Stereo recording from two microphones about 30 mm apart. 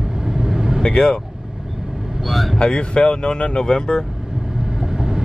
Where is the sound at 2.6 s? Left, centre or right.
Left.